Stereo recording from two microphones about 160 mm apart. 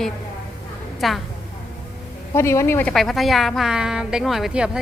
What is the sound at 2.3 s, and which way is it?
Speech, 15° left (ahead or behind).